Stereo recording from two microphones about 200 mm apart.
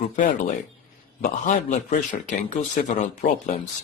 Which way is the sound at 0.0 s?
40° left (ahead or behind).